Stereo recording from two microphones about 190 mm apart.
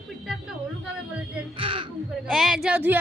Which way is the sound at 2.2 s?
Centre (ahead or behind).